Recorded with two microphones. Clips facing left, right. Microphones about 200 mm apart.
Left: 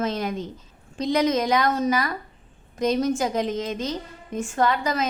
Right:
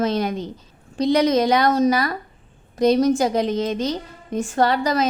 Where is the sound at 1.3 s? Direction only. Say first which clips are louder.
Right 4 dB; 35° right (ahead or behind).